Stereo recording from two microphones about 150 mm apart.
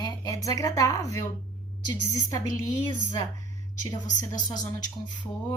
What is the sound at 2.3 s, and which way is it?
A woman's voice, 25° left (ahead or behind).